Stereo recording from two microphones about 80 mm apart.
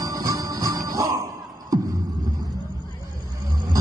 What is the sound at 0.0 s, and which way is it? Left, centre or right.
Music, right.